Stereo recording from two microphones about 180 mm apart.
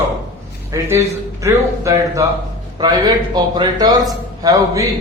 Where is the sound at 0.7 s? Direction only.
15° right (ahead or behind).